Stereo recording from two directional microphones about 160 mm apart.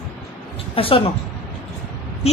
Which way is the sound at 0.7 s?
35° left (ahead or behind).